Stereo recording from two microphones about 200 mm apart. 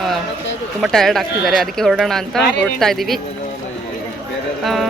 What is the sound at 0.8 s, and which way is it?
A woman's voice, centre (ahead or behind).